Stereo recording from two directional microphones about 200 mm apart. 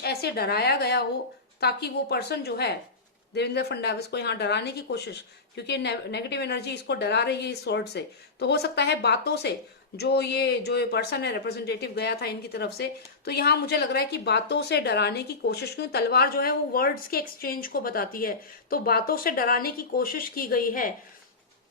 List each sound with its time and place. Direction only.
0.0 s a woman's voice: 55° left (ahead or behind)